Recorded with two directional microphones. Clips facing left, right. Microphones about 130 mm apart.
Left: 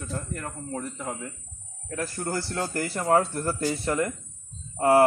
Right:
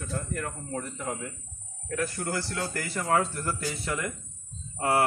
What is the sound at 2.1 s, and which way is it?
Speech, 40° left (ahead or behind).